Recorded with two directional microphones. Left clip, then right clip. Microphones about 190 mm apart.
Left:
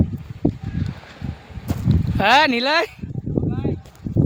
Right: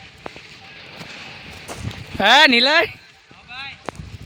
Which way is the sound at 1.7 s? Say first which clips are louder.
Left 4 dB; 20° right (ahead or behind).